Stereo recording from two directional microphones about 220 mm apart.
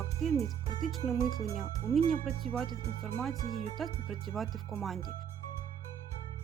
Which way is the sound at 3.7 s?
Centre (ahead or behind).